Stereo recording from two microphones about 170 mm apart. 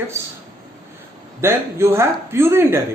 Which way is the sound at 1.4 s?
15° right (ahead or behind).